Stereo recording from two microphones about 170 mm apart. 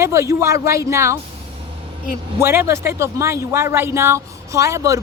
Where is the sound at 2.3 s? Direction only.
15° right (ahead or behind).